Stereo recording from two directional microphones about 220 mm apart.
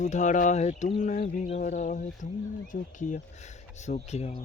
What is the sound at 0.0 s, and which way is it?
Speech, 35° left (ahead or behind).